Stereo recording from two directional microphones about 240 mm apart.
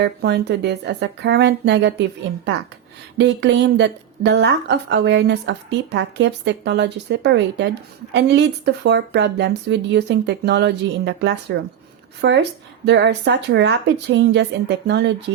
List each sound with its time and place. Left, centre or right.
0.0 s speech: right
3.2 s speech: right